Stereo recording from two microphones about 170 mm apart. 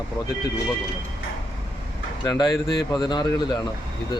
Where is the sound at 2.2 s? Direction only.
25° left (ahead or behind).